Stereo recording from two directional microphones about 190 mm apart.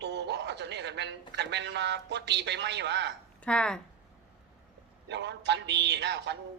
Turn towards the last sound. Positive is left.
turn(degrees=-65)  # may be behind; listen again after turning